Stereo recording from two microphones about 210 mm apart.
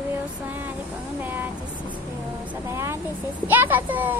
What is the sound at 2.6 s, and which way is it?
A child's voice, 15° right (ahead or behind).